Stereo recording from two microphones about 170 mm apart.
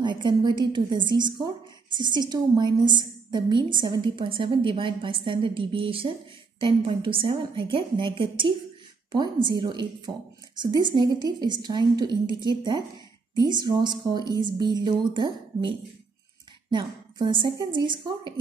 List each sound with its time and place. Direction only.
0.0 s a woman's voice: 25° right (ahead or behind)
16.7 s a woman's voice: 30° right (ahead or behind)